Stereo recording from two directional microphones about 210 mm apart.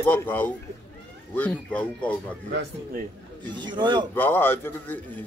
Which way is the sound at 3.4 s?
20° right (ahead or behind).